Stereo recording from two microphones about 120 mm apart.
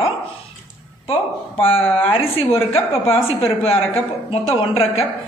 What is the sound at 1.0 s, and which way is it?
A woman's voice, 50° left (ahead or behind).